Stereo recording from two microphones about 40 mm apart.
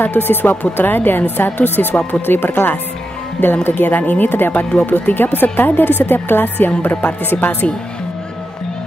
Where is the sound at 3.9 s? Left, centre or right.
Left.